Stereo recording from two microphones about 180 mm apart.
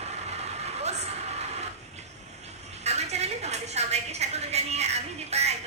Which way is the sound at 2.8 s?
35° right (ahead or behind).